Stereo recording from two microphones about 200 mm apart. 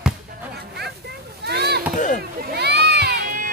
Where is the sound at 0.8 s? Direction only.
55° right (ahead or behind).